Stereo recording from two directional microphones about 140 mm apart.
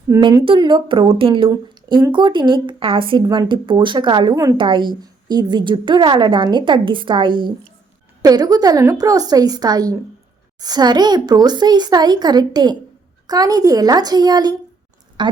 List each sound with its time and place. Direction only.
0.4 s a woman's voice: 35° right (ahead or behind)